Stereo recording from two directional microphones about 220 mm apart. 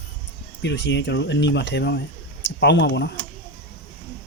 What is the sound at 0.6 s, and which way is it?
Speech, 55° left (ahead or behind).